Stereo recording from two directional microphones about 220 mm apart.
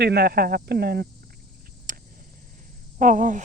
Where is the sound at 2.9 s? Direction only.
35° right (ahead or behind).